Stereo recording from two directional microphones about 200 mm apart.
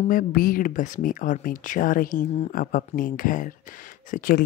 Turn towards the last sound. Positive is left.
turn(degrees=45)  # may be behind; listen again after turning